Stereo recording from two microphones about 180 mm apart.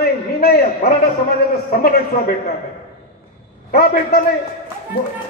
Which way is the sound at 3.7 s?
55° left (ahead or behind).